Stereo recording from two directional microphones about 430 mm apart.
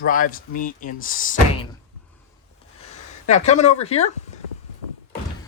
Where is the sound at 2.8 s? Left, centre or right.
Centre.